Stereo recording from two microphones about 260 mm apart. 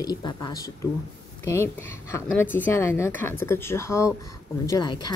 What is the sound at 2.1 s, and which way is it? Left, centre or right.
Speech, centre.